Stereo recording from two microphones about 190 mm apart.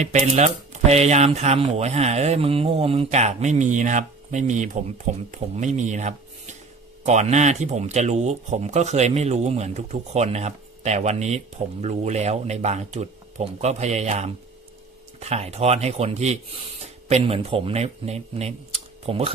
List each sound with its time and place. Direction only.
0.0 s speech: 35° right (ahead or behind)